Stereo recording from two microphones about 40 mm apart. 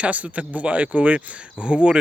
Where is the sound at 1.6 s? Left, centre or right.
Right.